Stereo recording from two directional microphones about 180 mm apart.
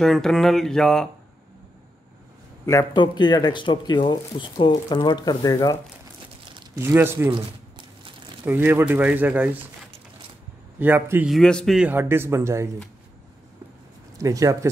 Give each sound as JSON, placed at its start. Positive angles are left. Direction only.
{"t": 0.0, "sound": "speech", "side_deg": 0}
{"t": 2.6, "sound": "speech", "side_deg": 15}
{"t": 6.5, "sound": "speech", "side_deg": -15}
{"t": 7.3, "sound": "a sound", "side_deg": -25}
{"t": 8.5, "sound": "speech", "side_deg": -10}
{"t": 10.8, "sound": "speech", "side_deg": -10}
{"t": 11.2, "sound": "speech", "side_deg": 0}
{"t": 14.1, "sound": "speech", "side_deg": -20}